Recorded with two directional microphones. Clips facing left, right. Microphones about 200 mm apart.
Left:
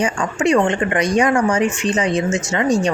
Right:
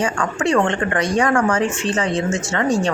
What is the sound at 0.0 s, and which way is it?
Speech, 20° left (ahead or behind).